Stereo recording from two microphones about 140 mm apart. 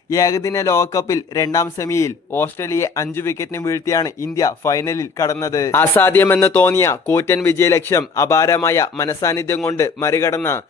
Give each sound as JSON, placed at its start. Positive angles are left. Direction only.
{"t": 0.1, "sound": "speech", "side_deg": 25}